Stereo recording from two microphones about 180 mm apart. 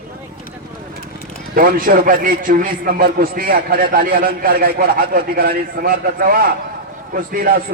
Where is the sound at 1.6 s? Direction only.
50° right (ahead or behind).